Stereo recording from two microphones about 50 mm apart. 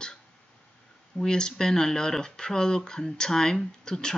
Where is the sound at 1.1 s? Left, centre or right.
Centre.